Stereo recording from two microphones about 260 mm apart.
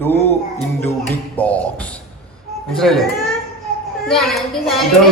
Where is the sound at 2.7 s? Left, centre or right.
Centre.